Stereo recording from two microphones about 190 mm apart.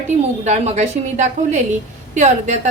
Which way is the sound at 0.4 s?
35° right (ahead or behind).